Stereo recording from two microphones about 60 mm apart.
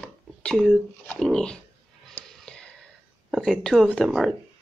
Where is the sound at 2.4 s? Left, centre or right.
Centre.